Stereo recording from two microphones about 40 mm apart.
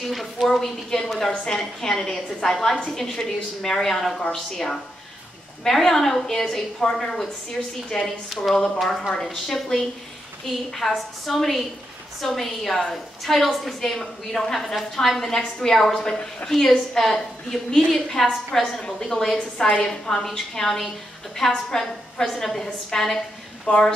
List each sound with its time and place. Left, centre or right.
0.0 s a sound: centre
0.5 s a woman's voice: centre
18.8 s a woman's voice: centre
19.9 s a woman's voice: centre
23.7 s speech: left